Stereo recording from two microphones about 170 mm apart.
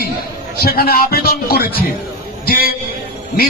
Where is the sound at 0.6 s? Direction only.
60° left (ahead or behind).